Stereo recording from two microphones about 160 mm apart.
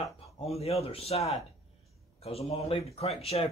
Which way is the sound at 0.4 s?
40° left (ahead or behind).